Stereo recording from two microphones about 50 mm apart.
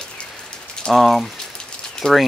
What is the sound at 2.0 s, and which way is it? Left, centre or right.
Speech, centre.